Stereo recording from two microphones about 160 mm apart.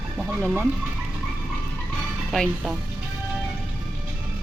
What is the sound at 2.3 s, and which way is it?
Speech, centre (ahead or behind).